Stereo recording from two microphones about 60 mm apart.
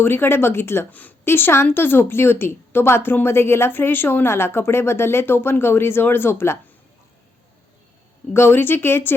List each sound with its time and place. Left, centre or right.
0.0 s speech: left
0.9 s speech: left
1.2 s a woman's voice: left
8.3 s a woman's voice: left